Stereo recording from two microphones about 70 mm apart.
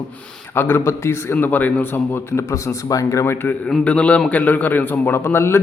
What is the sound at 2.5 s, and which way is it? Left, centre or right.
Speech, left.